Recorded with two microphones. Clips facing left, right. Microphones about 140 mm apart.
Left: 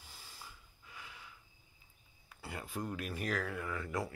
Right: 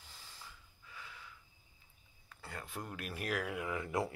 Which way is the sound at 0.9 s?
15° left (ahead or behind).